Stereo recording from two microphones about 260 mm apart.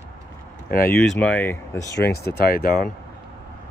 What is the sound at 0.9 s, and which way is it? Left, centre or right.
Speech, centre.